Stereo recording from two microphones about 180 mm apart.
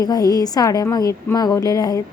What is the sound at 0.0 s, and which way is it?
A woman's voice, 20° left (ahead or behind).